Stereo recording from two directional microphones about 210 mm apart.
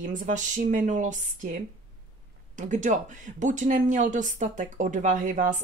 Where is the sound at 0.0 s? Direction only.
35° right (ahead or behind).